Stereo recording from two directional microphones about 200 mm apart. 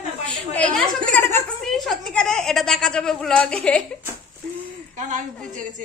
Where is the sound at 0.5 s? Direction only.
5° left (ahead or behind).